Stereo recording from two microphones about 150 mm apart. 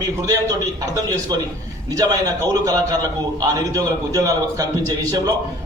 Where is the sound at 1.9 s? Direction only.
25° right (ahead or behind).